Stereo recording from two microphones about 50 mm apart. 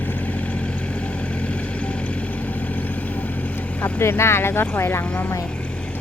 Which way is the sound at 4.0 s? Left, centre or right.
Left.